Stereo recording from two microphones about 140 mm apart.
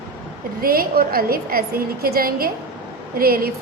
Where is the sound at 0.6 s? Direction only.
90° right.